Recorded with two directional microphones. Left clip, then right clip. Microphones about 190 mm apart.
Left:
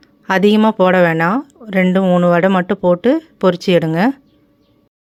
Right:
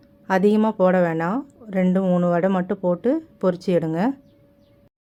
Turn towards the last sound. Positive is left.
turn(degrees=25)  # may be behind; listen again after turning